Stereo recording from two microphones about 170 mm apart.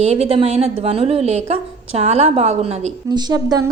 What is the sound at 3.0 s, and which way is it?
Speech, 25° right (ahead or behind).